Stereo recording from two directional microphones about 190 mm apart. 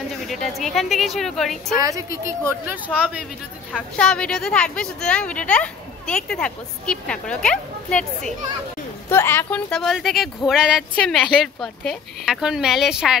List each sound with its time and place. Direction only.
0.3 s speech: centre (ahead or behind)
1.8 s speech: 15° right (ahead or behind)
4.0 s speech: 5° left (ahead or behind)